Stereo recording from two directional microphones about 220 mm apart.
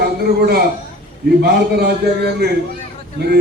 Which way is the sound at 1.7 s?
45° right (ahead or behind).